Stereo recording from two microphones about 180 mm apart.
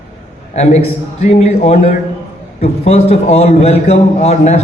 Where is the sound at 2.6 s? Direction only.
35° left (ahead or behind).